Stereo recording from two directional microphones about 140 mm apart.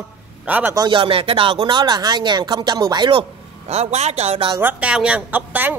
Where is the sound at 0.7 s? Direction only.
35° right (ahead or behind).